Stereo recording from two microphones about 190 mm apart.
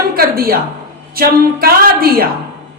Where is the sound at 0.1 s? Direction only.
50° right (ahead or behind).